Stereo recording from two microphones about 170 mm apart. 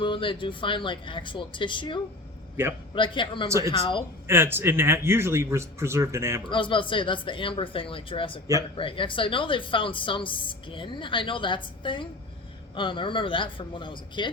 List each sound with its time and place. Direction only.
0.0 s speech: 30° left (ahead or behind)
4.3 s speech: 15° right (ahead or behind)
6.5 s speech: 30° left (ahead or behind)